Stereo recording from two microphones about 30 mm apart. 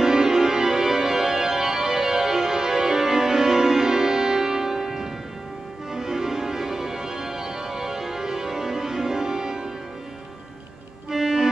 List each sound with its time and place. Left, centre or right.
0.0 s music: right
5.9 s organ: centre
11.1 s music: centre